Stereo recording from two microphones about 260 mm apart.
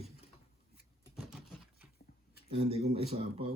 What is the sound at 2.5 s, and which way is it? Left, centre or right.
Speech, right.